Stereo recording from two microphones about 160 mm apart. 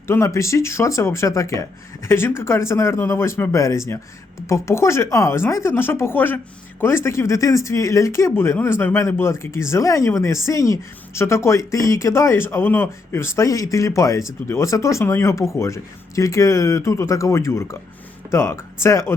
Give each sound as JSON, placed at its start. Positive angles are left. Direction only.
{"t": 0.1, "sound": "speech", "side_deg": 20}